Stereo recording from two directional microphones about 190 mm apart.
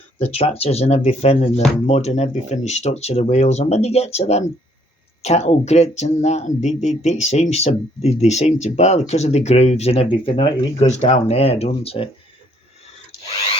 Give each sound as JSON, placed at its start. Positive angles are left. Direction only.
{"t": 0.2, "sound": "speech", "side_deg": 35}